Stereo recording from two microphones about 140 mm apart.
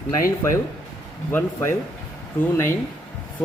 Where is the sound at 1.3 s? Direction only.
15° left (ahead or behind).